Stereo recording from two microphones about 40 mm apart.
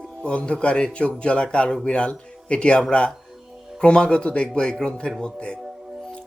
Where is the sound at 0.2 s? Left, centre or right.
Left.